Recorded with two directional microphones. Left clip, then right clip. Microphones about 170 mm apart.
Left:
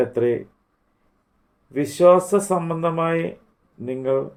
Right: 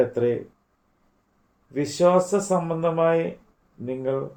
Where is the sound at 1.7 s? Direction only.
50° left (ahead or behind).